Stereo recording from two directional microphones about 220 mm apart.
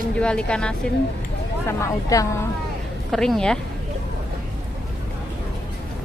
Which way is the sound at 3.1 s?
Centre (ahead or behind).